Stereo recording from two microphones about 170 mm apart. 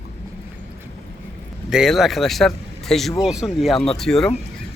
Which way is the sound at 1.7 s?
Centre (ahead or behind).